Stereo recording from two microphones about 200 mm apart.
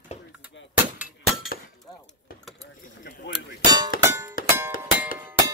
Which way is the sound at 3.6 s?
20° right (ahead or behind).